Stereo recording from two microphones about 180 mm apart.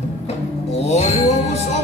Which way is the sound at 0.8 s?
40° left (ahead or behind).